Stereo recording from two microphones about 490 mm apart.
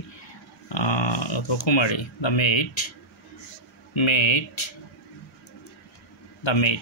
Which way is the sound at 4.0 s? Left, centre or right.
Left.